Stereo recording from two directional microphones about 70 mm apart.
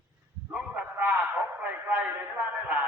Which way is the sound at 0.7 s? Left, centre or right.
Right.